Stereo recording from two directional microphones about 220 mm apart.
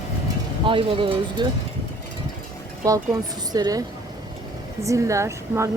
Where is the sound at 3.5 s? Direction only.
15° right (ahead or behind).